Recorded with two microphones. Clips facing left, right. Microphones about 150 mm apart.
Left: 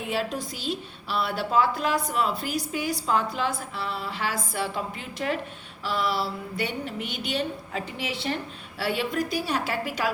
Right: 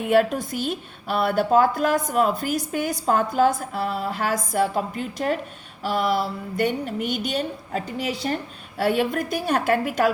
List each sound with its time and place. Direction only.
0.0 s a woman's voice: 55° right (ahead or behind)